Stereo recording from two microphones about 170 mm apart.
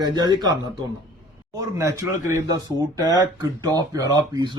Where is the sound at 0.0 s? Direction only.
25° right (ahead or behind).